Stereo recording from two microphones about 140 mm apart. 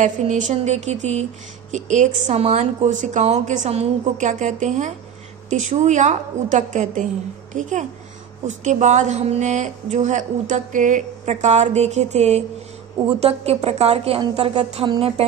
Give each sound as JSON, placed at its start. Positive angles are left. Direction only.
{"t": 0.0, "sound": "speech", "side_deg": -60}
{"t": 8.5, "sound": "a woman's voice", "side_deg": -60}